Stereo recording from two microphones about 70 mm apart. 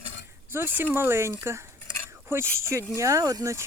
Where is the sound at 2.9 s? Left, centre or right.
Right.